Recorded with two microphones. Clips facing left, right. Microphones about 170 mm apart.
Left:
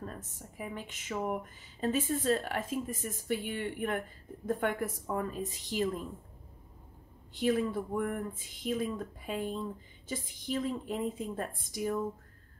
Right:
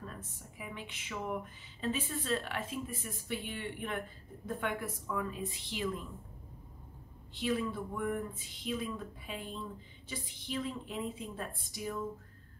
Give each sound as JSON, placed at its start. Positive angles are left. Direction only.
{"t": 0.0, "sound": "speech", "side_deg": 40}
{"t": 7.3, "sound": "speech", "side_deg": 50}